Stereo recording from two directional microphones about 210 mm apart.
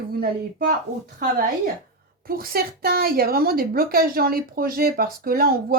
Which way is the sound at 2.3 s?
45° right (ahead or behind).